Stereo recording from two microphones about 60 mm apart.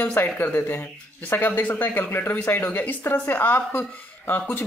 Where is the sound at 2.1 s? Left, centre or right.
Left.